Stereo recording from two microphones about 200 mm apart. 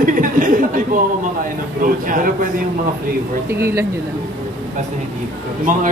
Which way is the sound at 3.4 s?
15° right (ahead or behind).